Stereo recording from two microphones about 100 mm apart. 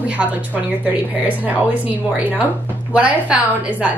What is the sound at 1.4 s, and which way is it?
Speech, 15° right (ahead or behind).